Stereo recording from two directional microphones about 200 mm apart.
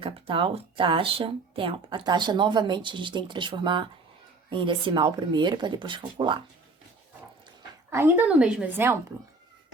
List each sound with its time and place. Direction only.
0.0 s speech: 25° right (ahead or behind)
7.9 s a woman's voice: 10° right (ahead or behind)